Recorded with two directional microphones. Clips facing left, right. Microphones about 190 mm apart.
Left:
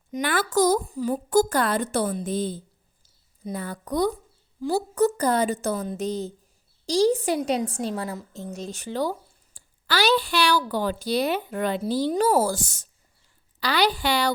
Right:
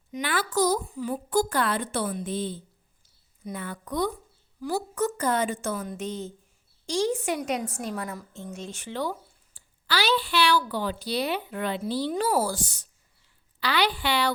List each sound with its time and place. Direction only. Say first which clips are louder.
0.1 s a woman's voice: left 4 dB; 50° left (ahead or behind)